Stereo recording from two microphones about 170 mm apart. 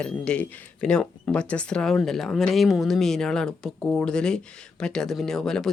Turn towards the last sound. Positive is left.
turn(degrees=5)  # may be behind; listen again after turning